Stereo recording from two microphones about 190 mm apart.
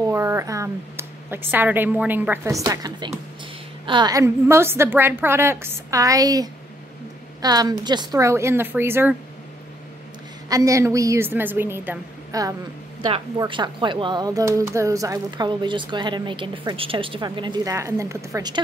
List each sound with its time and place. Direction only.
0.1 s a woman's voice: 15° right (ahead or behind)
10.5 s a woman's voice: 15° right (ahead or behind)